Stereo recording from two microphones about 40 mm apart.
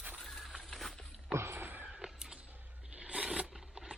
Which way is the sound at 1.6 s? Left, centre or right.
Right.